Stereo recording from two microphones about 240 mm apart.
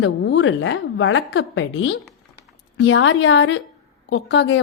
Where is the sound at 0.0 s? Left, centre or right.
Left.